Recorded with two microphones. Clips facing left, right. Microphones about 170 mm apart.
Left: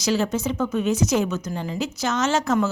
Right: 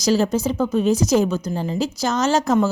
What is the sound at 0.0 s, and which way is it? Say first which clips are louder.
A woman's voice: right 4 dB; 35° right (ahead or behind).